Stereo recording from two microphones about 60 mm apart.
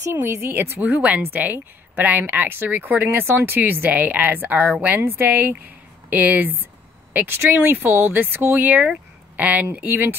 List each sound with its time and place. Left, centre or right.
0.1 s speech: right
8.8 s a sound: centre
9.8 s speech: right